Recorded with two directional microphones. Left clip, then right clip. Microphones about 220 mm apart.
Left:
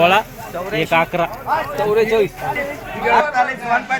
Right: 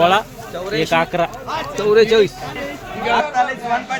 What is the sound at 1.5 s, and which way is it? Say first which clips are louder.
Speech: left 1 dB; 50° right (ahead or behind).